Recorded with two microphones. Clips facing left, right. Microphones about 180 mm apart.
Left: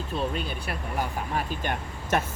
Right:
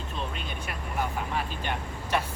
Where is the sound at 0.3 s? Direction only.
35° left (ahead or behind).